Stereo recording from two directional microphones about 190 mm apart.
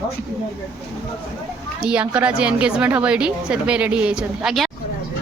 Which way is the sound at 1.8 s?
5° right (ahead or behind).